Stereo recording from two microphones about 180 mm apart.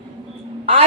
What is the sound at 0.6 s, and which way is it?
Speech, 35° right (ahead or behind).